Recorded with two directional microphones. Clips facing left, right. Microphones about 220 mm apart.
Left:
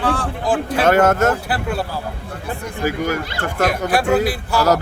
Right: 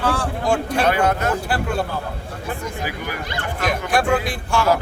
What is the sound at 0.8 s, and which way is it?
Speech, 45° left (ahead or behind).